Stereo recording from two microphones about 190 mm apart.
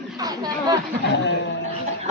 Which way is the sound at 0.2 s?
20° right (ahead or behind).